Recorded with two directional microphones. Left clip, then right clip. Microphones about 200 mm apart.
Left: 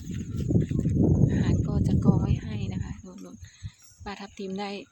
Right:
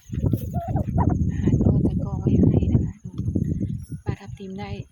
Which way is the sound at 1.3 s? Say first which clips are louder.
Right 5 dB; 5° left (ahead or behind).